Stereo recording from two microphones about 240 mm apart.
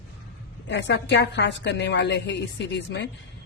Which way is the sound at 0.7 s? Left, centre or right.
Left.